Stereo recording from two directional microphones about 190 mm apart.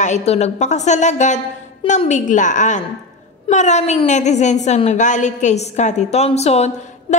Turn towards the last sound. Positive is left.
turn(degrees=35)  # may be behind; listen again after turning